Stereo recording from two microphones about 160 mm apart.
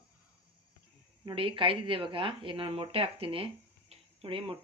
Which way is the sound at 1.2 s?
30° right (ahead or behind).